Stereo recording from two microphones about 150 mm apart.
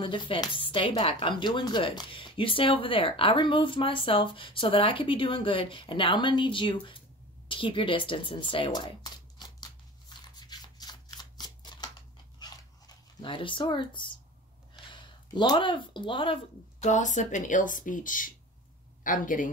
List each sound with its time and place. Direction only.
0.0 s speech: 30° left (ahead or behind)
7.4 s a sound: 35° left (ahead or behind)
12.4 s dog: 30° left (ahead or behind)
14.9 s speech: 30° left (ahead or behind)
16.8 s speech: 55° left (ahead or behind)